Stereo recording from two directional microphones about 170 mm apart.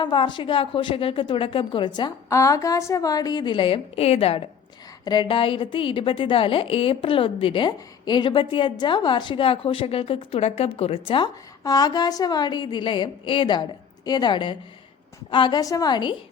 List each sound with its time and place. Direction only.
0.0 s a woman's voice: 30° left (ahead or behind)